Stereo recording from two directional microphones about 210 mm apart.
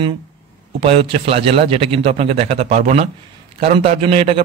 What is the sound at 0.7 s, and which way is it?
A man's voice, 30° right (ahead or behind).